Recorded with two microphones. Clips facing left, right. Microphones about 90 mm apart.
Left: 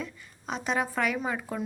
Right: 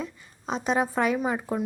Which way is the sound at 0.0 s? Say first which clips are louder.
Right 3 dB; 20° right (ahead or behind).